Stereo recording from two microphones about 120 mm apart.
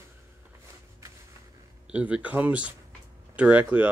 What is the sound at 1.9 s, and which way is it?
Speech, 10° right (ahead or behind).